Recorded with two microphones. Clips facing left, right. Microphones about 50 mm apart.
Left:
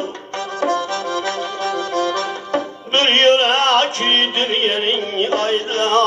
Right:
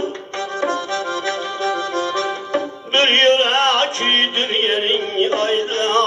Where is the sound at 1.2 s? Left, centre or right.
Right.